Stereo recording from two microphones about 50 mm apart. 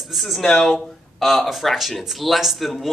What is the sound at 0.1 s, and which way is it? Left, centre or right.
Speech, centre.